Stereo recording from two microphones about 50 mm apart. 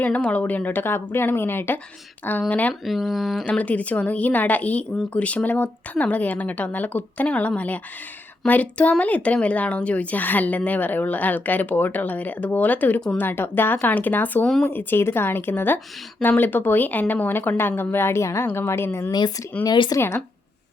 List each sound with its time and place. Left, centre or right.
0.0 s speech: left
2.5 s speech: left
2.8 s speech: centre
3.6 s speech: left
13.1 s speech: left
14.4 s speech: centre
14.7 s speech: left
18.2 s a woman's voice: left
19.5 s speech: left
20.0 s a woman's voice: left